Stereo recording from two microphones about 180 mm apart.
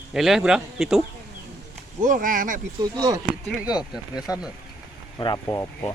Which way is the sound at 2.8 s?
20° right (ahead or behind).